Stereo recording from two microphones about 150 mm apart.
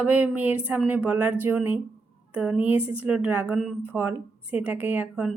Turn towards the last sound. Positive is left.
turn(degrees=-10)  # may be behind; listen again after turning